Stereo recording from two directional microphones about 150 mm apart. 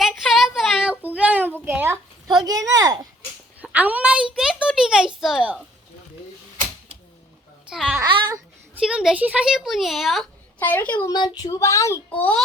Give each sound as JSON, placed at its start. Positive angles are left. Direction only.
{"t": 0.0, "sound": "a sound", "side_deg": 0}
{"t": 2.2, "sound": "speech", "side_deg": -25}
{"t": 3.6, "sound": "a sound", "side_deg": -10}
{"t": 7.7, "sound": "babbling", "side_deg": -5}
{"t": 8.0, "sound": "babbling", "side_deg": -30}
{"t": 8.7, "sound": "speech", "side_deg": -5}
{"t": 10.6, "sound": "a woman's voice", "side_deg": 15}
{"t": 11.1, "sound": "speech", "side_deg": 30}